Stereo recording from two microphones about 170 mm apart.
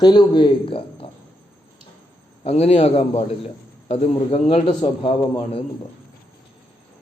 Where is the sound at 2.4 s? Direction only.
35° left (ahead or behind).